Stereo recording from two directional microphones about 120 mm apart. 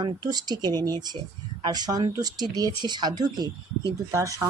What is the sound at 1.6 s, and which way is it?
Speech, 35° right (ahead or behind).